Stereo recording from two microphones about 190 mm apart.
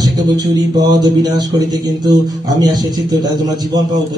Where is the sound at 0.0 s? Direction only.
20° right (ahead or behind).